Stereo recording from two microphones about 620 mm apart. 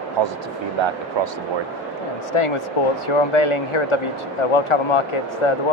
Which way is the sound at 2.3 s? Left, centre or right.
Left.